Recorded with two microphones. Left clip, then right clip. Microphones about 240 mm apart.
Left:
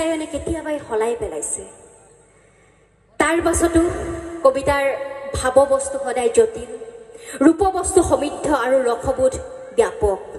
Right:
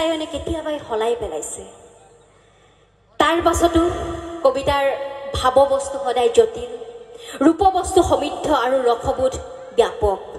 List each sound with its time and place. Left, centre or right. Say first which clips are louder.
0.1 s a woman's voice: even; left
3.3 s a woman's voice: right 1 dB; left
7.8 s a woman's voice: even; left
8.2 s a woman's voice: right 1 dB; left